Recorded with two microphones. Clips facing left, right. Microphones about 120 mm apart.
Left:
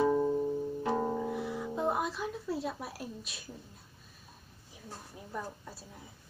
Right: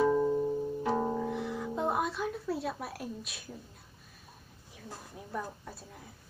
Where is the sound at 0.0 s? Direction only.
15° left (ahead or behind).